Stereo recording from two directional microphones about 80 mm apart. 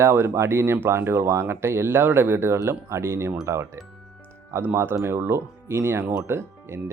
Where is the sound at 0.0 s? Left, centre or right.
Right.